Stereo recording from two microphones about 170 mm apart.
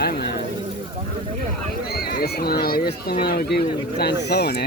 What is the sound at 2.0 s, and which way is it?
Speech, 65° left (ahead or behind).